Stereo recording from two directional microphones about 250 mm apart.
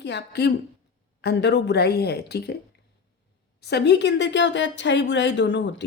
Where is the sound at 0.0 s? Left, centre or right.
Left.